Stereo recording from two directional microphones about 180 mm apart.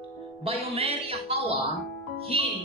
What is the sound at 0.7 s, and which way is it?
Speech, 30° right (ahead or behind).